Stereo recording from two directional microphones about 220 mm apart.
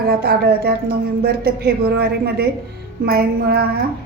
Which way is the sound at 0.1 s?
45° right (ahead or behind).